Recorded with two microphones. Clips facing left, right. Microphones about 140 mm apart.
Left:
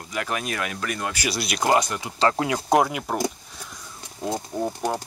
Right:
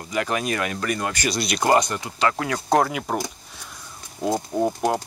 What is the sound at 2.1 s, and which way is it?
Speech, 30° left (ahead or behind).